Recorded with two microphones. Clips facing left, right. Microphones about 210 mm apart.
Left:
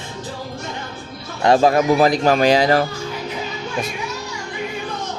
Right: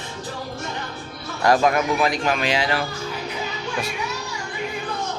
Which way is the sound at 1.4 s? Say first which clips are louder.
Left 4 dB; 30° left (ahead or behind).